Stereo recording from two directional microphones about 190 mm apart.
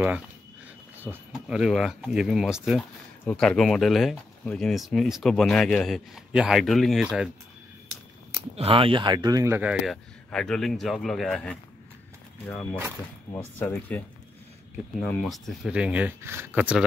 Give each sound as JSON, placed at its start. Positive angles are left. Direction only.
{"t": 1.0, "sound": "speech", "side_deg": -5}
{"t": 8.5, "sound": "speech", "side_deg": -30}
{"t": 13.6, "sound": "speech", "side_deg": 10}